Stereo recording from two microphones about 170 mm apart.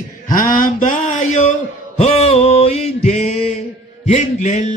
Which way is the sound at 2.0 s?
35° left (ahead or behind).